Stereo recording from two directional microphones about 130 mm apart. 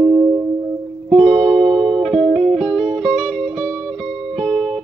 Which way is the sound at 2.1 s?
55° right (ahead or behind).